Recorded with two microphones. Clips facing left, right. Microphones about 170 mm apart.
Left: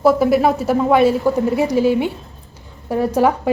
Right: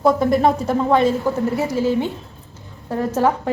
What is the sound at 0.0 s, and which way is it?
A woman's voice, 5° left (ahead or behind).